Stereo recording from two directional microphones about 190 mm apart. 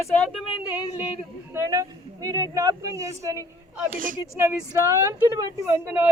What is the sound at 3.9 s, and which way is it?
Speech, 45° right (ahead or behind).